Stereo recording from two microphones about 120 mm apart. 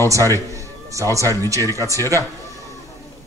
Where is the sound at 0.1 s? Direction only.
25° right (ahead or behind).